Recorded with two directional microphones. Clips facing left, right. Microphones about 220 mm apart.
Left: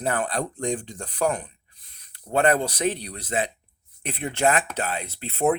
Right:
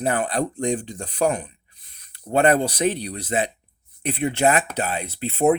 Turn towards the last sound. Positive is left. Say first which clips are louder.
# right 4 dB
turn(degrees=-15)  # may be behind; listen again after turning